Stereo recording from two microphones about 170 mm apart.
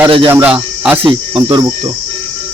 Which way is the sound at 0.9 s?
35° right (ahead or behind).